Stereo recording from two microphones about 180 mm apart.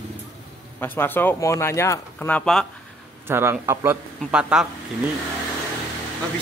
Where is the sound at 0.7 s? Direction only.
10° left (ahead or behind).